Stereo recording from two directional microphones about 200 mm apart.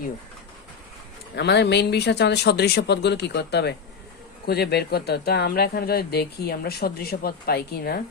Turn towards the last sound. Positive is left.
turn(degrees=50)  # may be behind; listen again after turning